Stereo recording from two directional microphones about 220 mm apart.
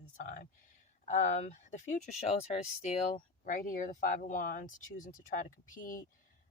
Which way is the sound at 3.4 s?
40° left (ahead or behind).